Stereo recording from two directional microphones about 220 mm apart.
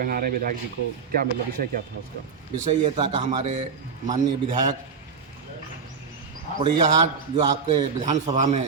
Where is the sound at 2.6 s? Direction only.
30° right (ahead or behind).